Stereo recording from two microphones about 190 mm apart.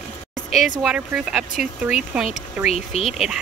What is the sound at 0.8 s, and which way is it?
Speech, 5° right (ahead or behind).